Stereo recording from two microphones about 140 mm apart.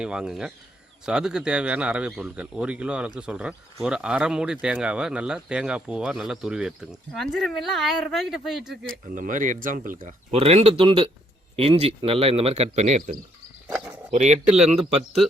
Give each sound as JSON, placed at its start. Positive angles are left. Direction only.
{"t": 0.0, "sound": "speech", "side_deg": -5}
{"t": 8.9, "sound": "speech", "side_deg": -75}
{"t": 10.3, "sound": "speech", "side_deg": -45}